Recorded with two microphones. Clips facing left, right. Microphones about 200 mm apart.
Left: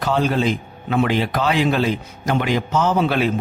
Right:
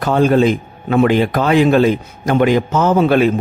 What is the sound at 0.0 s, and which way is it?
A man's voice, 50° right (ahead or behind).